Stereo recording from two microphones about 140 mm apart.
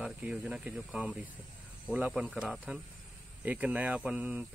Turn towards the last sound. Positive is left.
turn(degrees=-10)  # may be behind; listen again after turning